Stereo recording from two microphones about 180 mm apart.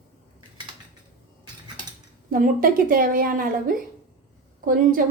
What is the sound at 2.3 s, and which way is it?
A woman's voice, 50° right (ahead or behind).